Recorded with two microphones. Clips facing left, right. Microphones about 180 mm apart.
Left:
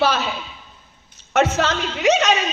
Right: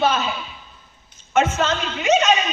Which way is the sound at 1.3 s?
75° left (ahead or behind).